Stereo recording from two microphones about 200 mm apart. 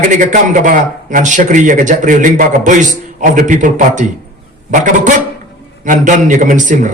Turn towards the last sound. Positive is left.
turn(degrees=-40)  # may be behind; listen again after turning